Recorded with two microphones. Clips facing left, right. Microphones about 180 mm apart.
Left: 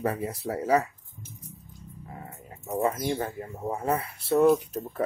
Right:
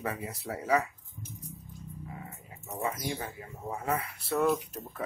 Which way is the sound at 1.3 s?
Centre (ahead or behind).